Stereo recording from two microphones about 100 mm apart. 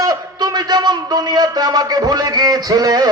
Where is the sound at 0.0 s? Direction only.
40° right (ahead or behind).